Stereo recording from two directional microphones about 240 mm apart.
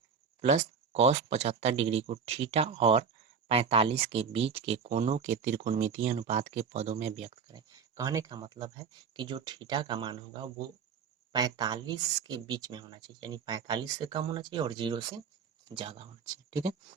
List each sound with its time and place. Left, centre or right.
0.4 s speech: right